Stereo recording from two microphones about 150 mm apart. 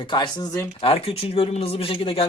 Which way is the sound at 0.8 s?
40° left (ahead or behind).